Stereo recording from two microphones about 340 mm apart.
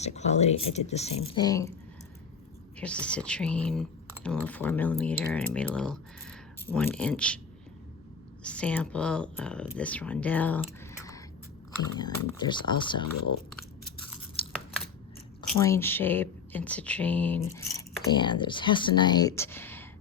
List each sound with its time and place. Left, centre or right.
0.0 s speech: centre
2.7 s speech: centre
8.4 s speech: centre
14.4 s scissors: centre
15.4 s speech: centre